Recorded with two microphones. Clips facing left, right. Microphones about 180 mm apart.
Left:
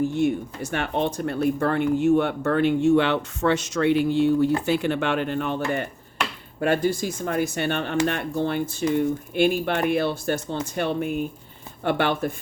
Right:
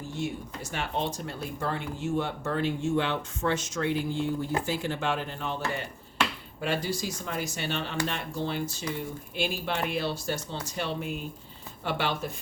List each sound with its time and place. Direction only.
0.1 s speech: 60° left (ahead or behind)